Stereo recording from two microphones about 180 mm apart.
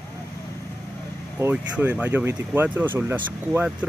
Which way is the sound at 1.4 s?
10° right (ahead or behind).